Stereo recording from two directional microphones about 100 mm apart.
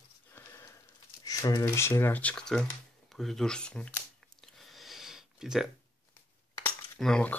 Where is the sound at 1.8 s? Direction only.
25° left (ahead or behind); by 3.9 s 10° left (ahead or behind).